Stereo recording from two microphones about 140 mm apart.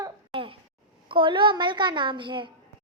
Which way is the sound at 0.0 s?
40° right (ahead or behind).